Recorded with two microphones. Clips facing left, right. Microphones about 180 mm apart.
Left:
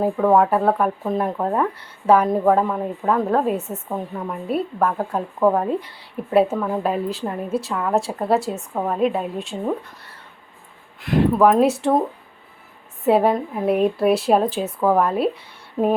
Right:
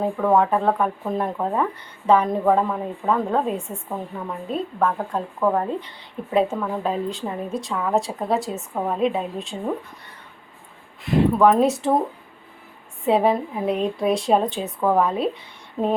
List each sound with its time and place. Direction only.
0.0 s a woman's voice: 5° left (ahead or behind)
13.1 s a woman's voice: centre (ahead or behind)